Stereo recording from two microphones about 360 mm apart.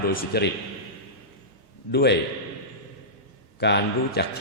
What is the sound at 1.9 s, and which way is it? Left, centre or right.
Speech, left.